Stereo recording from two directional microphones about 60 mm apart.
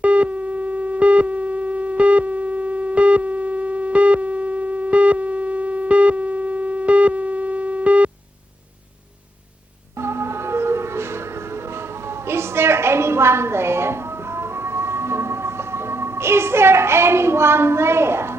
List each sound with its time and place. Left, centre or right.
0.0 s busy signal: centre
10.0 s music: right
12.0 s a sound: right